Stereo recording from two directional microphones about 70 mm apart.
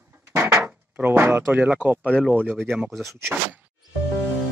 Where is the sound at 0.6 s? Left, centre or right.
Right.